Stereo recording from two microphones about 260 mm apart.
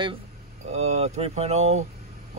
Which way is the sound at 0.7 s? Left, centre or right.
Right.